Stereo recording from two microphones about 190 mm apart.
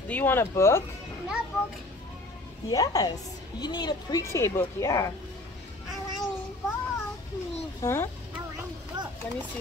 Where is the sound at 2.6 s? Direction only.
20° left (ahead or behind).